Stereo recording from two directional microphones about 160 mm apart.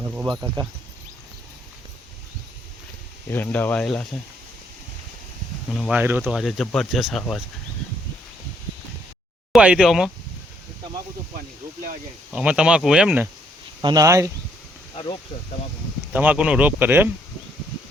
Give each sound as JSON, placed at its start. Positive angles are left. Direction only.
{"t": 0.0, "sound": "speech", "side_deg": -15}
{"t": 3.2, "sound": "speech", "side_deg": 10}
{"t": 5.9, "sound": "speech", "side_deg": -10}
{"t": 9.5, "sound": "speech", "side_deg": -5}
{"t": 12.3, "sound": "speech", "side_deg": -5}
{"t": 13.8, "sound": "speech", "side_deg": -20}
{"t": 14.9, "sound": "speech", "side_deg": 35}
{"t": 16.1, "sound": "speech", "side_deg": -10}